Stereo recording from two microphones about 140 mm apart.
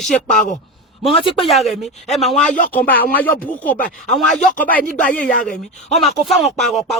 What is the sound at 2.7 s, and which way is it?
Speech, 10° left (ahead or behind).